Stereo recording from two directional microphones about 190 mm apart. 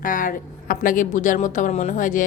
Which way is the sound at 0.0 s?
45° left (ahead or behind).